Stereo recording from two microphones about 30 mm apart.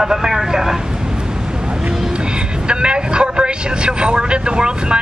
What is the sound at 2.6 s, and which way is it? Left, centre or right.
Vehicle, right.